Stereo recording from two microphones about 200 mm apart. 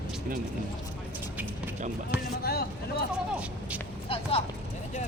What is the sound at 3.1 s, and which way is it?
Speech, 5° right (ahead or behind).